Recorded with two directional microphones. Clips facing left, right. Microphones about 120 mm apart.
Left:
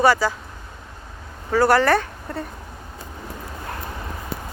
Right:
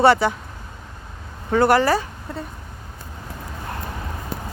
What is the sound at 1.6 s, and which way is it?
Speech, 15° right (ahead or behind).